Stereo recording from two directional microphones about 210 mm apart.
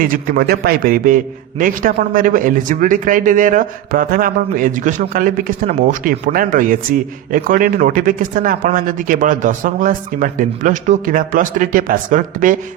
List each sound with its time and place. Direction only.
0.0 s a man's voice: 40° right (ahead or behind)